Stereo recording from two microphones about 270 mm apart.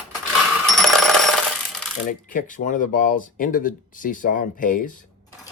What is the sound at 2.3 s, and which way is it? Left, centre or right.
Speech, left.